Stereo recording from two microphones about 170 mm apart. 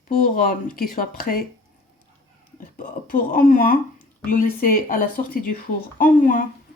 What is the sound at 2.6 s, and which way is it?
Speech, 55° left (ahead or behind).